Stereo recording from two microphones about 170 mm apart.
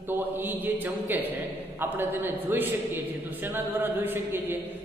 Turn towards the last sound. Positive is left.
turn(degrees=-10)  # may be behind; listen again after turning